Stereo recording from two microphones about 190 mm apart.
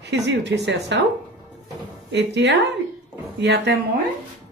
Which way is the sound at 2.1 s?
65° right (ahead or behind).